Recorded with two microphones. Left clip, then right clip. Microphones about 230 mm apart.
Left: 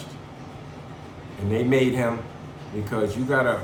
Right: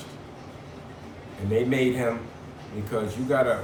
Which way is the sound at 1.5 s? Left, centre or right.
Centre.